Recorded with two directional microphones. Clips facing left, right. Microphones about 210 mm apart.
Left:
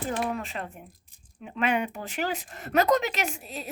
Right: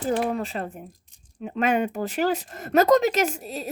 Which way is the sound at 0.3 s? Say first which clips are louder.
Right 6 dB; 35° right (ahead or behind).